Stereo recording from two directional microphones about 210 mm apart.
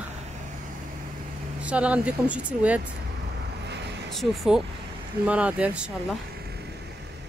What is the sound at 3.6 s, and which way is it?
Vehicle, 55° right (ahead or behind).